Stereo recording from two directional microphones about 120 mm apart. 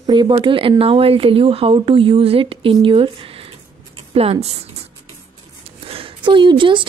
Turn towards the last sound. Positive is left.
turn(degrees=-45)  # may be behind; listen again after turning